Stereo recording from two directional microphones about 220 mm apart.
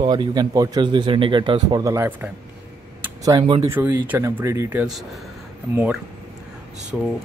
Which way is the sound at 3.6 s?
10° right (ahead or behind).